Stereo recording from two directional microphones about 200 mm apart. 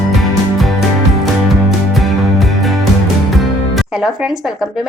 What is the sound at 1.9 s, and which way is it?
Music, centre (ahead or behind).